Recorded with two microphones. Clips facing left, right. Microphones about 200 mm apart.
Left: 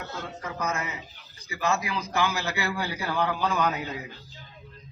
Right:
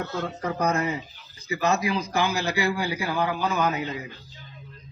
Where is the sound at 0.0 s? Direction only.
40° right (ahead or behind).